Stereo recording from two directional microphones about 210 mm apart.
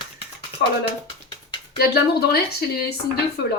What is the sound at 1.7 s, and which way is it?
Speech, 50° left (ahead or behind).